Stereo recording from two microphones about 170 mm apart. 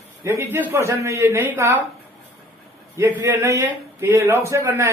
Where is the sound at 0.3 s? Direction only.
15° right (ahead or behind).